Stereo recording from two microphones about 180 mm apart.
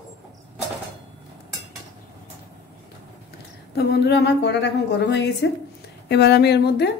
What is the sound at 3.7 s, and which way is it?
A woman's voice, 65° left (ahead or behind).